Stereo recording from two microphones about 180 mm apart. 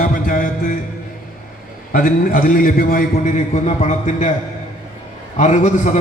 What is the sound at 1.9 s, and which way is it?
A man's voice, 50° left (ahead or behind).